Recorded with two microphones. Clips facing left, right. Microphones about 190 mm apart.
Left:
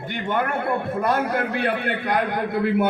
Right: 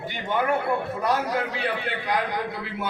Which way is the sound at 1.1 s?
55° left (ahead or behind).